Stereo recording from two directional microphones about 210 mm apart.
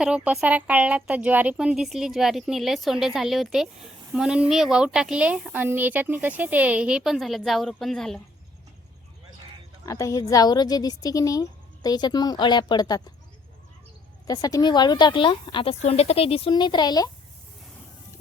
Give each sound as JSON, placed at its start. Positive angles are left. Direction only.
{"t": 0.0, "sound": "a woman's voice", "side_deg": -5}
{"t": 9.8, "sound": "a woman's voice", "side_deg": 15}
{"t": 14.3, "sound": "a woman's voice", "side_deg": 15}